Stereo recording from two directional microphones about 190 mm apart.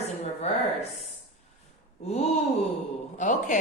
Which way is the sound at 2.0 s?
35° left (ahead or behind).